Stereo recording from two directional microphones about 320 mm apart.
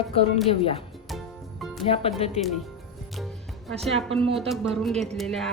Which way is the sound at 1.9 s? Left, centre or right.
Centre.